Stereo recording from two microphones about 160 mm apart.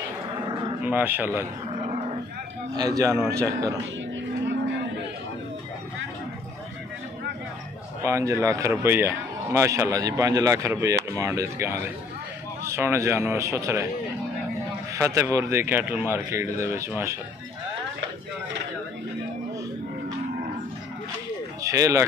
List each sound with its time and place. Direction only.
0.8 s speech: 10° right (ahead or behind)
1.8 s wild animals: 40° right (ahead or behind)
2.7 s a man's voice: 20° right (ahead or behind)
8.0 s a man's voice: 20° right (ahead or behind)
15.0 s speech: 20° right (ahead or behind)
21.6 s speech: 20° right (ahead or behind)